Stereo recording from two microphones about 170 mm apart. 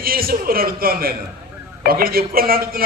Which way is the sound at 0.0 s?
60° right (ahead or behind).